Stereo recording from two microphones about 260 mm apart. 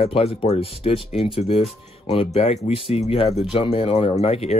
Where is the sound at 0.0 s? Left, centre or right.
Left.